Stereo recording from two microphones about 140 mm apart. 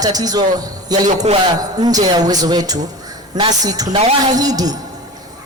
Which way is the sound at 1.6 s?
25° right (ahead or behind).